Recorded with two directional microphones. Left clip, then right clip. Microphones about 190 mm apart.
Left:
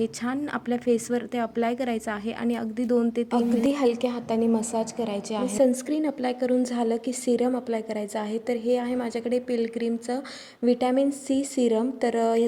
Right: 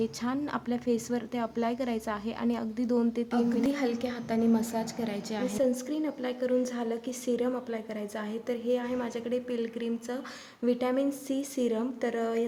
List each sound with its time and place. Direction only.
0.0 s a woman's voice: 15° left (ahead or behind)